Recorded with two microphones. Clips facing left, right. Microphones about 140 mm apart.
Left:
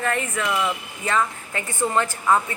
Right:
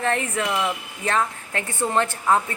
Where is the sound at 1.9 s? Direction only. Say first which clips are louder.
Even; 30° right (ahead or behind).